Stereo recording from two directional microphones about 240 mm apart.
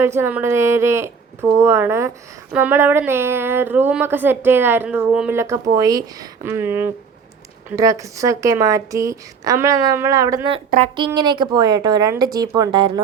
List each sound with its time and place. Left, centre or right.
0.0 s speech: centre